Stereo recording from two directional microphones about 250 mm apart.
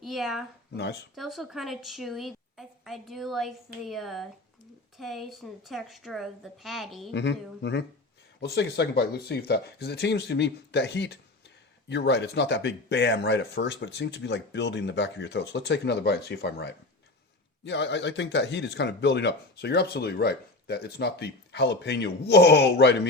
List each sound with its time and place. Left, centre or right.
0.0 s speech: centre
0.7 s speech: left
1.1 s a woman's voice: centre
7.1 s speech: left